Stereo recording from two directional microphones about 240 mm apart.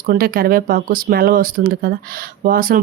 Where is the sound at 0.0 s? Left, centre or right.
Right.